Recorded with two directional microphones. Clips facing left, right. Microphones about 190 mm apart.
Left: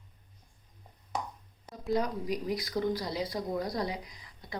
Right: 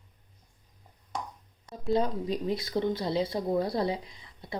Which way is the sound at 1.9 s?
25° right (ahead or behind).